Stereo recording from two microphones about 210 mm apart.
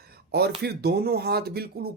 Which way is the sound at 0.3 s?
50° right (ahead or behind).